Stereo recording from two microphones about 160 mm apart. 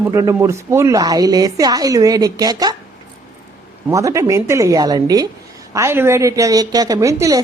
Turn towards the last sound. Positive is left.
turn(degrees=-20)  # may be behind; listen again after turning